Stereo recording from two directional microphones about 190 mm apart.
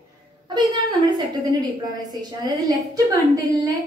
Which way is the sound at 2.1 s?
20° right (ahead or behind).